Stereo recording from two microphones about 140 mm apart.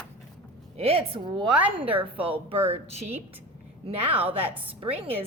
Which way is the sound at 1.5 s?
10° right (ahead or behind).